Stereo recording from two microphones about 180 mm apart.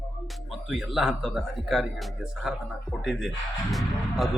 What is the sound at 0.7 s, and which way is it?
Speech, centre (ahead or behind).